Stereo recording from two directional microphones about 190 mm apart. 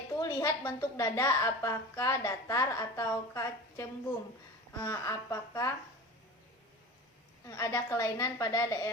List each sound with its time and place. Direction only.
0.2 s a woman's voice: 20° left (ahead or behind)
7.4 s a woman's voice: 15° left (ahead or behind)